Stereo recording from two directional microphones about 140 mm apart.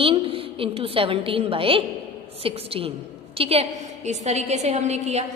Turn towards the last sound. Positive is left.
turn(degrees=-55)  # may be behind; listen again after turning